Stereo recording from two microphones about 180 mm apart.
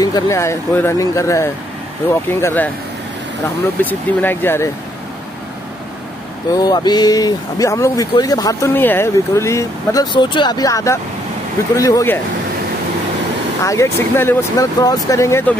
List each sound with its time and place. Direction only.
0.0 s speech: 20° left (ahead or behind)
3.8 s speech: 10° left (ahead or behind)
6.5 s speech: 20° left (ahead or behind)
13.7 s speech: 15° left (ahead or behind)